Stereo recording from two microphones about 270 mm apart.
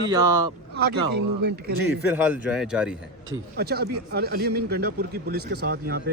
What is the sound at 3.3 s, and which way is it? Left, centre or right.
A man's voice, right.